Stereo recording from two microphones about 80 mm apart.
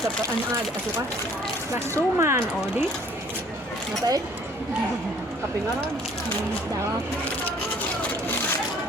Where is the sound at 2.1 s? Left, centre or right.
Right.